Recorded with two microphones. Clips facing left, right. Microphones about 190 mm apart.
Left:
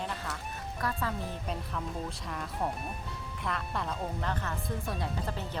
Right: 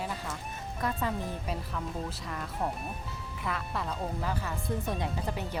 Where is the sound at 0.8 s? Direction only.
20° right (ahead or behind).